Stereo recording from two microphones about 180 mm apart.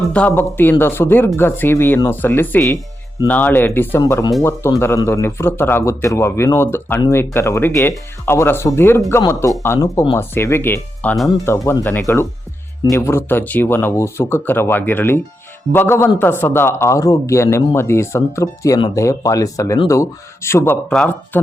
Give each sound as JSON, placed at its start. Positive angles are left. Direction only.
{"t": 0.1, "sound": "speech", "side_deg": 10}
{"t": 4.0, "sound": "speech", "side_deg": 20}
{"t": 20.9, "sound": "speech", "side_deg": 5}